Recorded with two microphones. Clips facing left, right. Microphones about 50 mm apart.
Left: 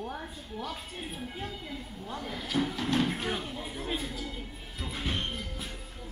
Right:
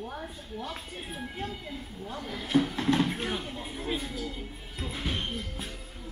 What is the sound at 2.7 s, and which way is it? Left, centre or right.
Speech, right.